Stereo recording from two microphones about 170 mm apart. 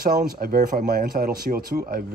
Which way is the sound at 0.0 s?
60° right (ahead or behind).